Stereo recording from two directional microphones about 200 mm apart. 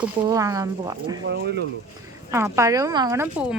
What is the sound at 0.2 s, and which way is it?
A woman's voice, 15° right (ahead or behind).